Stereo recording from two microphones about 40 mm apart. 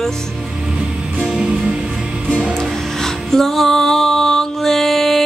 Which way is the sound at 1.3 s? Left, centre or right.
Centre.